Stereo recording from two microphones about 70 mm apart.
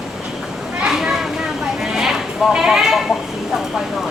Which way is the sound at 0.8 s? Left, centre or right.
Centre.